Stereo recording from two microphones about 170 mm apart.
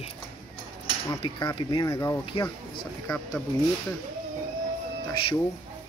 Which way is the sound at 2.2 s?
30° left (ahead or behind).